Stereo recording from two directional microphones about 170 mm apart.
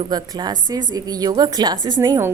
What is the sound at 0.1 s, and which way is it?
A woman's voice, 25° right (ahead or behind).